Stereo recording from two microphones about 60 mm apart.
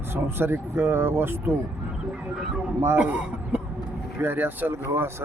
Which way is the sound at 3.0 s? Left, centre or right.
Right.